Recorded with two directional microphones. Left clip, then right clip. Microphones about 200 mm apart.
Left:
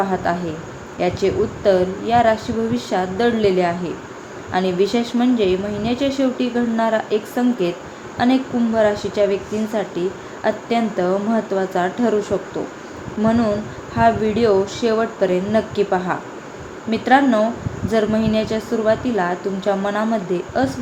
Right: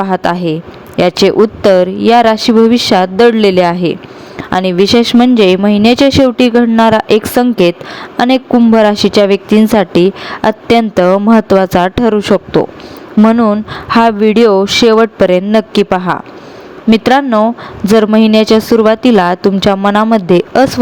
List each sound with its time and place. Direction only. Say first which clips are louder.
0.0 s speech: right 8 dB; 55° right (ahead or behind)